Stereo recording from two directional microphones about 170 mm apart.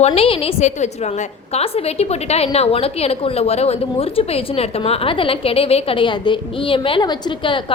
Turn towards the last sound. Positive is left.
turn(degrees=30)  # may be behind; listen again after turning